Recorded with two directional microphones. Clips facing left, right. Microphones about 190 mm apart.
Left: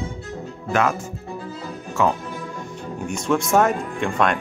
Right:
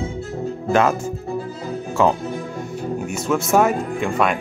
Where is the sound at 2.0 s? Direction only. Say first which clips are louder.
Right 3 dB; 30° right (ahead or behind).